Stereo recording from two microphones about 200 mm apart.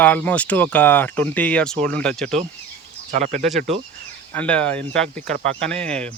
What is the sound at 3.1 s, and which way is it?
Speech, 40° right (ahead or behind).